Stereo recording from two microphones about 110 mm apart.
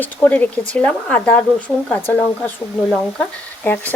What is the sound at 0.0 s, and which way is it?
Speech, 15° left (ahead or behind).